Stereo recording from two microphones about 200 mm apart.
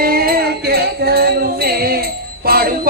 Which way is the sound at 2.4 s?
50° right (ahead or behind).